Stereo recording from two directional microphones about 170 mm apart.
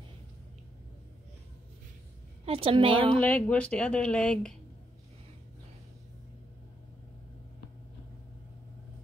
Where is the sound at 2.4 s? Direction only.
35° right (ahead or behind).